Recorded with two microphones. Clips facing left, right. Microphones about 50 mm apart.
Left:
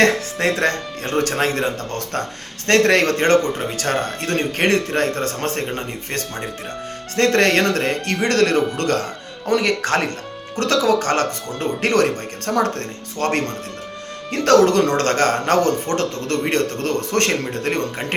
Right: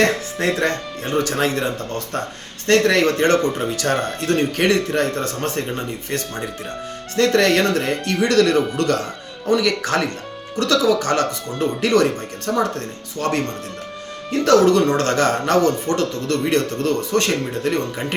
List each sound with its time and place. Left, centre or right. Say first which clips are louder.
0.0 s music: left 2 dB; left
0.6 s a man's voice: left 1 dB; left
2.6 s a man's voice: even; left
3.8 s a man's voice: right 1 dB; left
14.3 s a man's voice: even; left
14.9 s a man's voice: even; left